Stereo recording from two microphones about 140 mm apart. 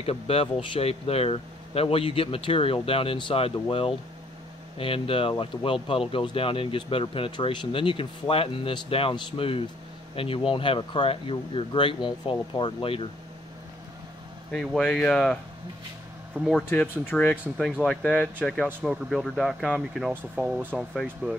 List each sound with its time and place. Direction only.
0.0 s speech: 45° left (ahead or behind)
14.5 s speech: centre (ahead or behind)
16.3 s speech: centre (ahead or behind)
16.8 s speech: 15° left (ahead or behind)